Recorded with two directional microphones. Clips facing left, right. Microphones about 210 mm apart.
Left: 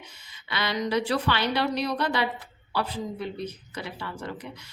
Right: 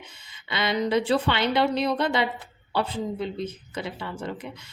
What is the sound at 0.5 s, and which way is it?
A woman's voice, 25° right (ahead or behind).